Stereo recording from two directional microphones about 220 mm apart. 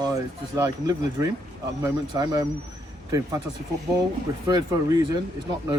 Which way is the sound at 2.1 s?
20° right (ahead or behind).